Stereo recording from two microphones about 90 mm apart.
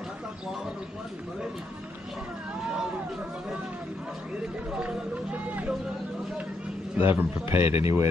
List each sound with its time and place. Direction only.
4.7 s speech: 15° right (ahead or behind)
7.0 s a man's voice: 25° right (ahead or behind)